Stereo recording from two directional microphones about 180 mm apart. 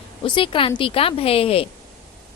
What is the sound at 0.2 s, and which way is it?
A woman's voice, 30° left (ahead or behind).